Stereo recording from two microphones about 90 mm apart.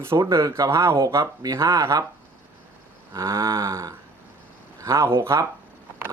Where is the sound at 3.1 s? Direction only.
30° right (ahead or behind).